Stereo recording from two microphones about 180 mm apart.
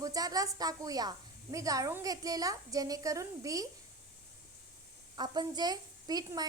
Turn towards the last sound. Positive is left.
turn(degrees=-20)  # may be behind; listen again after turning